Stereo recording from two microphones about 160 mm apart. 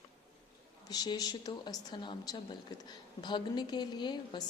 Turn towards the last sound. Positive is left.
turn(degrees=25)  # may be behind; listen again after turning